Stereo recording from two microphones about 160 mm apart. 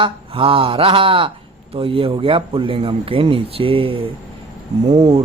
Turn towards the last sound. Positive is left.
turn(degrees=-40)  # may be behind; listen again after turning